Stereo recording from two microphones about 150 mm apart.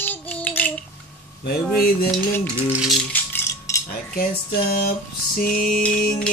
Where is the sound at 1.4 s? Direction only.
90° left.